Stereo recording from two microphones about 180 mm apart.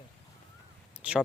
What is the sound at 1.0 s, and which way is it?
Speech, 5° right (ahead or behind).